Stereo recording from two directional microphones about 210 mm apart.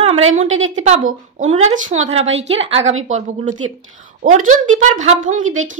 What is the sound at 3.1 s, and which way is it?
A woman's voice, 35° right (ahead or behind).